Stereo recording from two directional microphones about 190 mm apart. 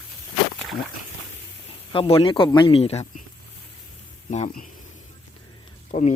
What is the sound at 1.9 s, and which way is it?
A man's voice, 30° left (ahead or behind).